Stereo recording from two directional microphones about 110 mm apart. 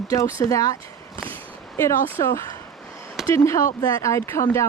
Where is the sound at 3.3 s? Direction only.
25° left (ahead or behind).